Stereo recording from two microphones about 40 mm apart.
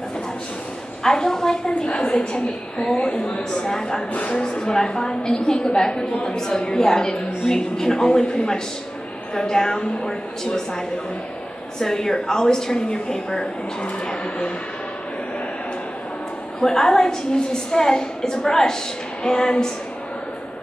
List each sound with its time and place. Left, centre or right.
1.0 s a woman's voice: centre
1.7 s a woman's voice: left
4.1 s speech: left
4.4 s a woman's voice: centre
11.8 s a woman's voice: centre
16.5 s a woman's voice: centre